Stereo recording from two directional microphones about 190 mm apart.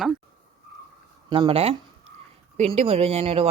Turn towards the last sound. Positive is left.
turn(degrees=-30)  # may be behind; listen again after turning